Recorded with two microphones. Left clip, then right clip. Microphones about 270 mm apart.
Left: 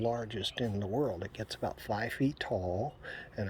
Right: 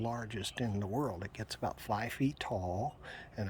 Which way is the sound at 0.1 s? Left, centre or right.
Centre.